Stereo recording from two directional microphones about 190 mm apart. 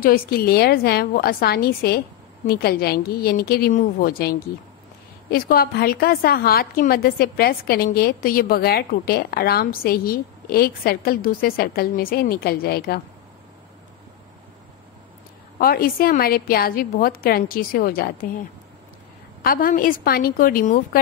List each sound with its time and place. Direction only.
0.0 s a woman's voice: 50° left (ahead or behind)
15.6 s a woman's voice: 50° left (ahead or behind)
19.4 s a woman's voice: 50° left (ahead or behind)